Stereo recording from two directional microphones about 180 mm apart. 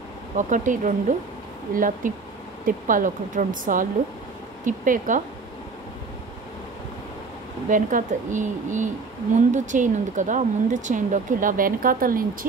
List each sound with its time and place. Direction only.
0.4 s speech: 45° right (ahead or behind)
7.7 s speech: 45° right (ahead or behind)